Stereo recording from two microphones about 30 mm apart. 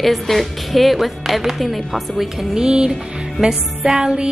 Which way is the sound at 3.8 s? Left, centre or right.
Right.